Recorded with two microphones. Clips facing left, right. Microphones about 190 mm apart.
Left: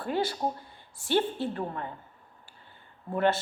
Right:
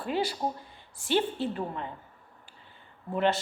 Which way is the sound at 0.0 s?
15° right (ahead or behind).